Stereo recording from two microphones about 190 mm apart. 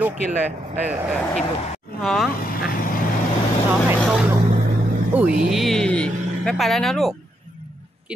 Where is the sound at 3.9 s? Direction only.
Centre (ahead or behind).